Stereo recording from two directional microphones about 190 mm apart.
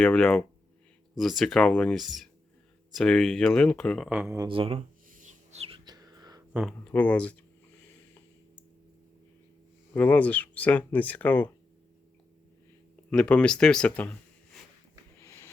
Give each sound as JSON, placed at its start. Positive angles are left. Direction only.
{"t": 0.0, "sound": "speech", "side_deg": 10}
{"t": 4.4, "sound": "speech", "side_deg": -30}
{"t": 5.0, "sound": "a sound", "side_deg": -45}
{"t": 6.5, "sound": "speech", "side_deg": -5}
{"t": 9.9, "sound": "speech", "side_deg": 10}
{"t": 13.1, "sound": "speech", "side_deg": 5}
{"t": 15.2, "sound": "a sound", "side_deg": 15}